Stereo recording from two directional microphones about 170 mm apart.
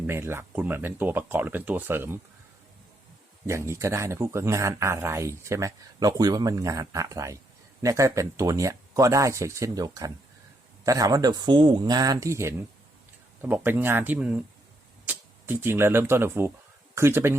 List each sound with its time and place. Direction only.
0.1 s speech: 15° right (ahead or behind)
3.4 s speech: 15° right (ahead or behind)